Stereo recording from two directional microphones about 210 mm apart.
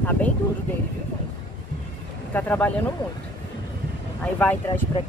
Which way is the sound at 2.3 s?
5° left (ahead or behind).